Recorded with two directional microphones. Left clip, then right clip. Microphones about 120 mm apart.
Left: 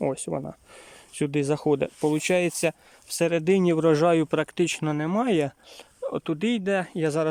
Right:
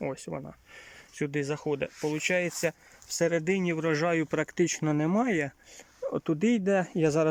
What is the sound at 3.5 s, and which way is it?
Speech, 30° left (ahead or behind).